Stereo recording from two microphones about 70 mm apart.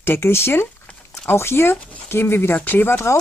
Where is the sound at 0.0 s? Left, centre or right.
Left.